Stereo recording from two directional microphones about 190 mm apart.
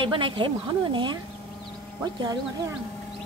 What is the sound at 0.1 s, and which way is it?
Speech, 25° right (ahead or behind).